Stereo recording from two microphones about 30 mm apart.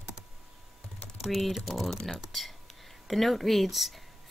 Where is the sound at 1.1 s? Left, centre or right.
Centre.